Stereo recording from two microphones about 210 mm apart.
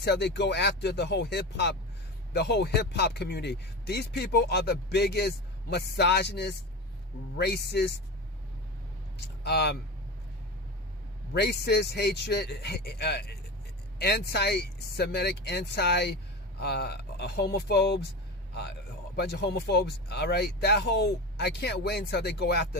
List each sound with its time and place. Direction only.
0.0 s speech: 55° left (ahead or behind)
9.1 s speech: 50° left (ahead or behind)
11.3 s speech: 50° left (ahead or behind)
19.1 s speech: 50° left (ahead or behind)